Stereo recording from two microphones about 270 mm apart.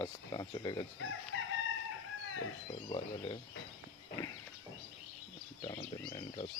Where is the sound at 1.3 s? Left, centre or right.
Left.